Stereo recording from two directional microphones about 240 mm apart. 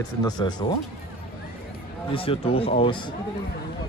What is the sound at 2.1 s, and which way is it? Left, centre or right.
Speech, left.